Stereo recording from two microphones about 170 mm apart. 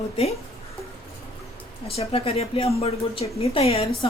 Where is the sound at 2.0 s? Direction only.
35° left (ahead or behind).